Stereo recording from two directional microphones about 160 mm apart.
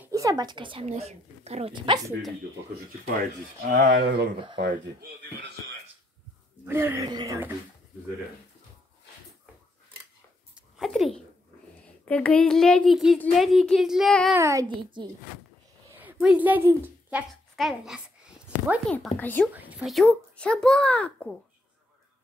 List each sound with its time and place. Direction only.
0.0 s speech: 20° right (ahead or behind); by 1.7 s 40° right (ahead or behind)
3.6 s speech: 65° right (ahead or behind)
4.6 s speech: 90° right
6.6 s speech: 15° right (ahead or behind)
10.5 s a sound: centre (ahead or behind)
11.8 s a woman's voice: 10° left (ahead or behind)
14.3 s a child's voice: 20° right (ahead or behind)
15.9 s a sound: 10° right (ahead or behind)
17.6 s a child's voice: centre (ahead or behind)
19.5 s a child's voice: 10° right (ahead or behind); by 21.4 s 10° left (ahead or behind)